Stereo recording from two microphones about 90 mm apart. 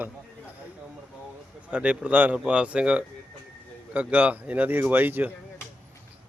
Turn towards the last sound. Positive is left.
turn(degrees=-20)  # may be behind; listen again after turning